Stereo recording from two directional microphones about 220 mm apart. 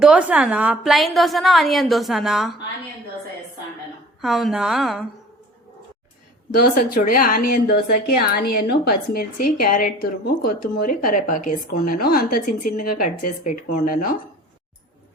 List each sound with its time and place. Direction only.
0.0 s a woman's voice: 5° right (ahead or behind)
4.2 s a woman's voice: centre (ahead or behind)
6.6 s a woman's voice: 40° left (ahead or behind)